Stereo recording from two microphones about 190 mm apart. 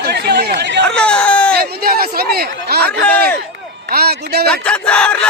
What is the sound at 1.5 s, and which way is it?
Speech, 55° right (ahead or behind).